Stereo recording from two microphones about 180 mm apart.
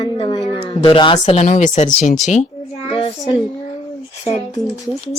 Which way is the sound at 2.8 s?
30° left (ahead or behind).